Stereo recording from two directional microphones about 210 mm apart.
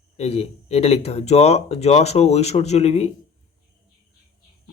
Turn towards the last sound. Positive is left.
turn(degrees=30)  # may be behind; listen again after turning